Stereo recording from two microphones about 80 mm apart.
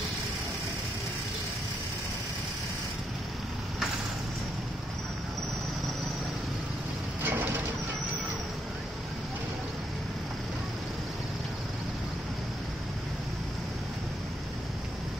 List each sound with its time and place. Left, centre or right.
7.2 s bird: right